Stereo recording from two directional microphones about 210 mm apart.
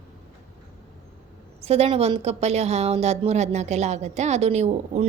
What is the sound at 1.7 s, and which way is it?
Speech, 30° right (ahead or behind).